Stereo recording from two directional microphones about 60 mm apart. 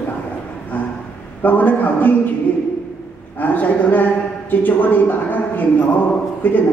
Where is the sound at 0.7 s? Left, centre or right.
Left.